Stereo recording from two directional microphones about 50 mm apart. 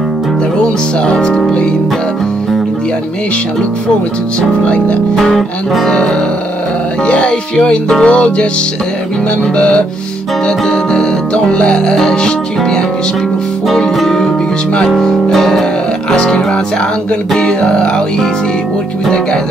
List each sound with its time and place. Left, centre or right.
0.6 s speech: centre
4.4 s speech: left
5.1 s speech: centre
7.1 s speech: left
9.6 s speech: left
10.7 s music: centre
13.7 s music: centre
15.3 s music: centre
16.1 s music: centre
17.4 s speech: centre